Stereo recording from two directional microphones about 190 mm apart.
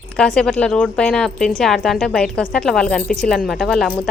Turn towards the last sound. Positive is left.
turn(degrees=5)  # may be behind; listen again after turning